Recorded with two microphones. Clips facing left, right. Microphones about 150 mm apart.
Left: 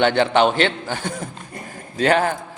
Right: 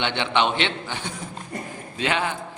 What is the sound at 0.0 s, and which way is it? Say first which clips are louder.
A man's voice: left 7 dB; 40° left (ahead or behind).